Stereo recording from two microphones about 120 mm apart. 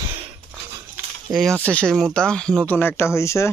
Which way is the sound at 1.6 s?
10° left (ahead or behind).